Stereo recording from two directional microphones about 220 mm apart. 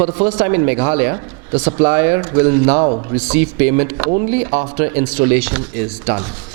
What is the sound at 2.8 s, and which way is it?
Speech, 25° right (ahead or behind).